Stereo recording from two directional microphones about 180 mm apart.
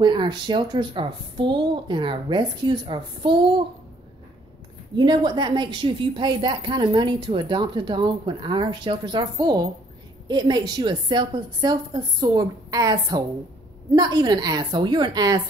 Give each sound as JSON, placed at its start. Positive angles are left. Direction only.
{"t": 0.0, "sound": "a woman's voice", "side_deg": -25}
{"t": 4.9, "sound": "a woman's voice", "side_deg": -25}